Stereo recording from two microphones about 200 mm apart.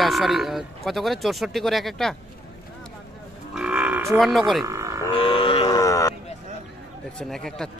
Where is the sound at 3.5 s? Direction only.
5° right (ahead or behind).